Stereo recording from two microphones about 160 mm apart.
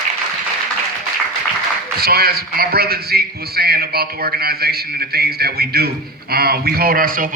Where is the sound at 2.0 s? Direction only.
75° right (ahead or behind).